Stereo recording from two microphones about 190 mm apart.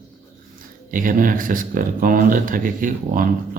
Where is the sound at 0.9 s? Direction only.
45° right (ahead or behind).